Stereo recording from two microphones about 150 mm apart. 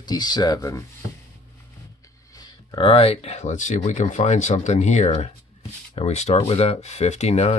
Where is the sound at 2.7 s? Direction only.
35° left (ahead or behind).